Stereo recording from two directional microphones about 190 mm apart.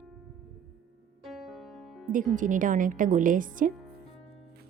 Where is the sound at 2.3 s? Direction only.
45° right (ahead or behind).